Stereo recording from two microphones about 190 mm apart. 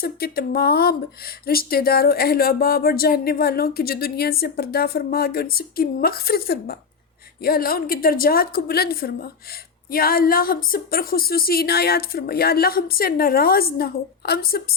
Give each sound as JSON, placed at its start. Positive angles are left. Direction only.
{"t": 0.0, "sound": "a woman's voice", "side_deg": 55}